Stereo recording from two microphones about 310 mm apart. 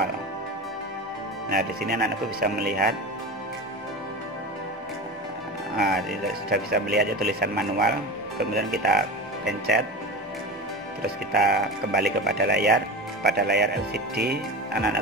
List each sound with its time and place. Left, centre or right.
1.5 s speech: right
5.8 s speech: right
11.3 s speech: right